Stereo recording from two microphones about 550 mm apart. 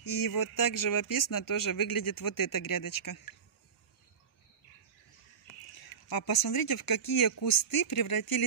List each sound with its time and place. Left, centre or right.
0.0 s speech: left
5.8 s speech: left